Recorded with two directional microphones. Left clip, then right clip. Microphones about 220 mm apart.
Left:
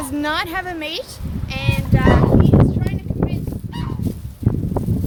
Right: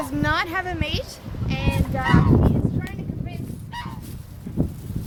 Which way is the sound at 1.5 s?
20° left (ahead or behind).